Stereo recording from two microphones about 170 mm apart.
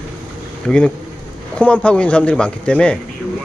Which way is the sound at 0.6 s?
5° left (ahead or behind).